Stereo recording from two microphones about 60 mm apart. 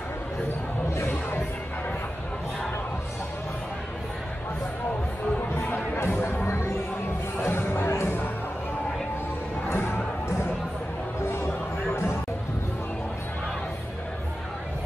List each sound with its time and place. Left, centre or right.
0.9 s music: left
5.5 s chatter: left
6.4 s music: left
9.7 s a sound: left
11.2 s music: left